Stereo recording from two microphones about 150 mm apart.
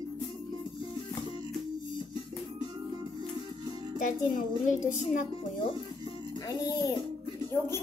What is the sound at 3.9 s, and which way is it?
A child's voice, 60° left (ahead or behind).